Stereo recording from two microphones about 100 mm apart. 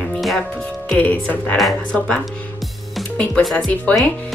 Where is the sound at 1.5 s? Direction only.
5° left (ahead or behind).